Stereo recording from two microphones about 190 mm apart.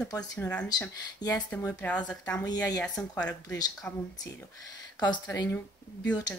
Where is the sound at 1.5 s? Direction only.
5° left (ahead or behind).